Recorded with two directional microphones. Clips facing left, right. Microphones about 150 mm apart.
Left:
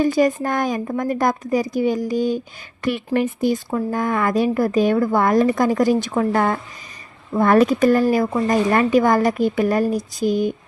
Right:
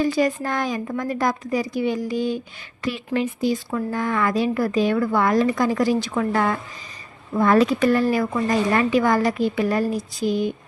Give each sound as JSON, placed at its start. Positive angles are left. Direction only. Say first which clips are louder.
{"t": 0.0, "sound": "a woman's voice", "louder": "left 3 dB", "side_deg": 45}
{"t": 7.3, "sound": "a woman's voice", "louder": "left 2 dB", "side_deg": 50}